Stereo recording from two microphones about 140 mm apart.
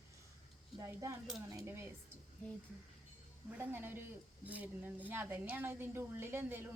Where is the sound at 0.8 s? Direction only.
20° right (ahead or behind).